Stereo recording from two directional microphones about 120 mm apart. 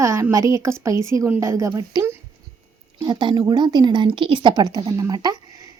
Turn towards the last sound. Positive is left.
turn(degrees=-35)  # may be behind; listen again after turning